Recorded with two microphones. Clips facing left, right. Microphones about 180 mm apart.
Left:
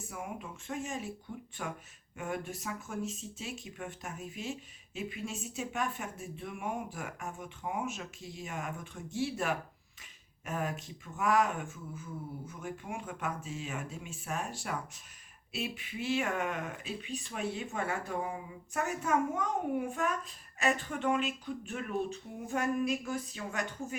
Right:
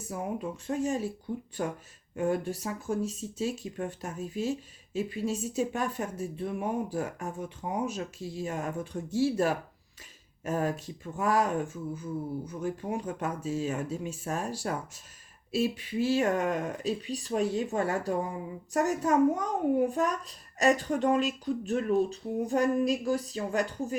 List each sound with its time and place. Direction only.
0.1 s speech: 35° right (ahead or behind)